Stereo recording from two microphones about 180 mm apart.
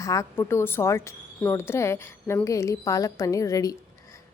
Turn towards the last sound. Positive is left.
turn(degrees=20)  # may be behind; listen again after turning